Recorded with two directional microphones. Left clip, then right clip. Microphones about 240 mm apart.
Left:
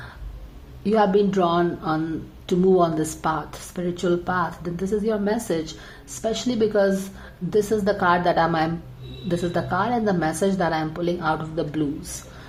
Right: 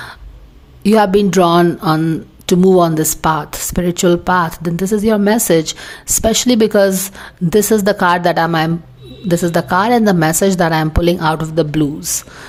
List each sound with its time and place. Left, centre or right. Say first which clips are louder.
0.8 s speech: right 7 dB; right